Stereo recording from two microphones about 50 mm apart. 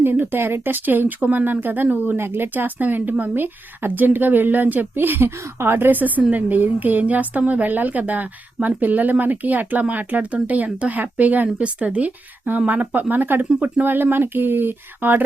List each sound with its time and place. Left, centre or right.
0.0 s speech: right
11.4 s speech: right